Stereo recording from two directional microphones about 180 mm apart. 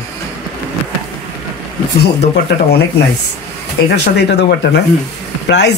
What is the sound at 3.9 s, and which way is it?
Speech, 70° left (ahead or behind).